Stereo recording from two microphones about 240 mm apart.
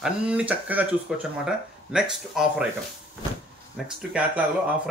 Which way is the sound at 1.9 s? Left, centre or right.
Centre.